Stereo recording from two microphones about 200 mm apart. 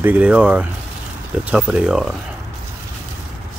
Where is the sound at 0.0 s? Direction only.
5° right (ahead or behind).